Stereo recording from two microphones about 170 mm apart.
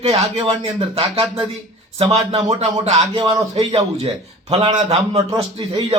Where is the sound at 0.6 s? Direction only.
35° right (ahead or behind).